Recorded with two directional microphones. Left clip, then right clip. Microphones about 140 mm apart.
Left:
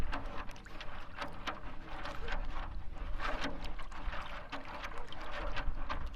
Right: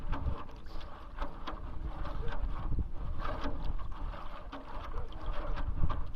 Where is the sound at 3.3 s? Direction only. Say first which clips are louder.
Left 1 dB; 30° left (ahead or behind).